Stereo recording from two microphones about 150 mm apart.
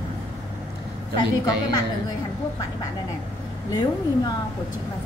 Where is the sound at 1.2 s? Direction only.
25° left (ahead or behind).